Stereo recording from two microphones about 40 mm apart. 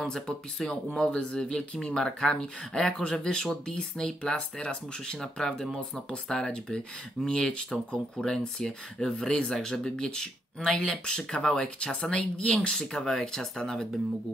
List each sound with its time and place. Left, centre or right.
0.0 s speech: centre
12.8 s speech: centre